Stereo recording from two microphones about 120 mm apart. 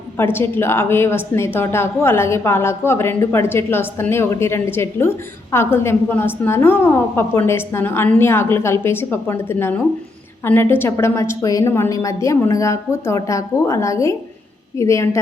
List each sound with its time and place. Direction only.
0.2 s a woman's voice: 20° left (ahead or behind)